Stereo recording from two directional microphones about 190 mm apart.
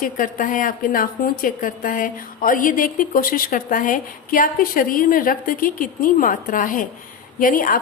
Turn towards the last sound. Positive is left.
turn(degrees=45)  # may be behind; listen again after turning